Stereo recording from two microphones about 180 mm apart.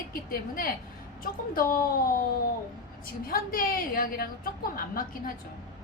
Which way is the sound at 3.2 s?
55° left (ahead or behind).